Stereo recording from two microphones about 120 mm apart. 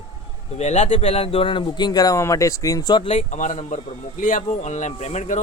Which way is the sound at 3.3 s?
70° left (ahead or behind).